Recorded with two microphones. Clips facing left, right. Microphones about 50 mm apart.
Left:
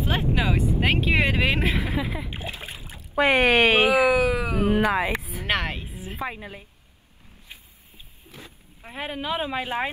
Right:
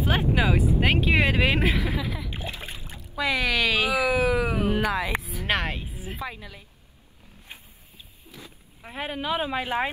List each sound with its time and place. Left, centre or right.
0.2 s speech: centre
2.0 s speech: left
2.3 s splash: centre
3.2 s speech: left
4.1 s speech: centre
4.7 s speech: left
5.5 s speech: centre
6.2 s speech: left
8.3 s vehicle: left
8.8 s speech: centre